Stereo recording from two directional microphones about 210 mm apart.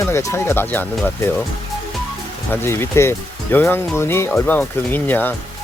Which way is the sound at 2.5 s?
10° left (ahead or behind).